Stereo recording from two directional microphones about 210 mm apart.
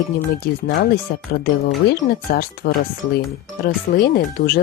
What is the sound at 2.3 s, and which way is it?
Speech, 45° left (ahead or behind).